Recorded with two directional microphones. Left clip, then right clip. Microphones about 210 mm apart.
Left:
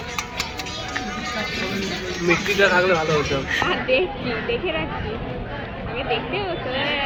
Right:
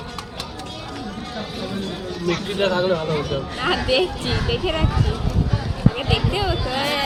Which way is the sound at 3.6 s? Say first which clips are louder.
Right 4 dB; 40° right (ahead or behind).